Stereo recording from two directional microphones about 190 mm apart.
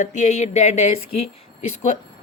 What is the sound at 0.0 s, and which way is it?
Speech, 40° left (ahead or behind).